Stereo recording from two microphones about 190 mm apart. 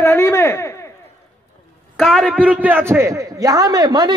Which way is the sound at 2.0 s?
Centre (ahead or behind).